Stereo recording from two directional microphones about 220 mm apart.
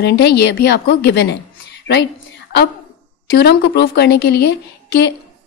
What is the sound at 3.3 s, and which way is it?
Speech, 50° left (ahead or behind).